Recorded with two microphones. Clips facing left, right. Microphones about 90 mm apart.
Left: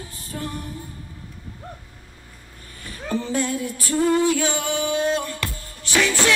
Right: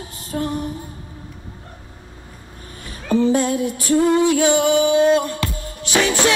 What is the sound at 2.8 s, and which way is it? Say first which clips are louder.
Female singing: right 9 dB; 20° right (ahead or behind).